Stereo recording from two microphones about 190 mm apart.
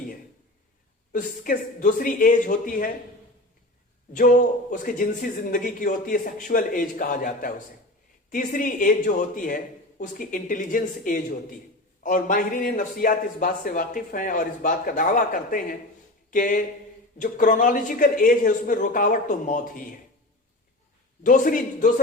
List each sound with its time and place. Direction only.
1.1 s a man's voice: 45° left (ahead or behind)
4.1 s a man's voice: 45° left (ahead or behind)
21.2 s a man's voice: 45° left (ahead or behind)